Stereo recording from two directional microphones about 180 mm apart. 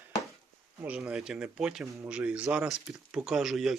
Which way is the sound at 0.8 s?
5° right (ahead or behind).